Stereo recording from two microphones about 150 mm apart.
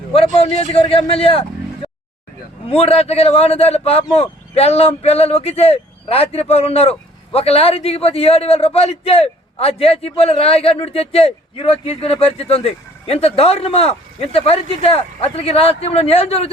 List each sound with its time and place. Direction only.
0.1 s a man's voice: 40° left (ahead or behind)